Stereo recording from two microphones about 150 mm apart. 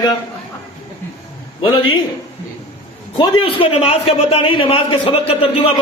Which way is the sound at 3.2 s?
35° left (ahead or behind).